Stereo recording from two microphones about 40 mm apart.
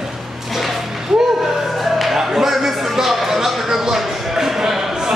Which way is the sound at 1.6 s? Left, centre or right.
Centre.